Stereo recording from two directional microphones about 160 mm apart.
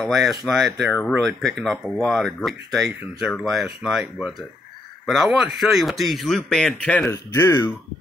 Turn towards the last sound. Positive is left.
turn(degrees=15)  # may be behind; listen again after turning